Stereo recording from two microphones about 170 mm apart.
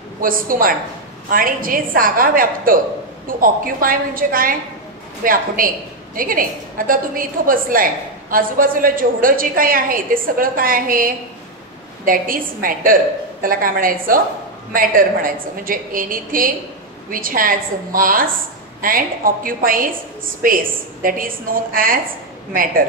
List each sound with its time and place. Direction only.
0.2 s a woman's voice: 55° right (ahead or behind)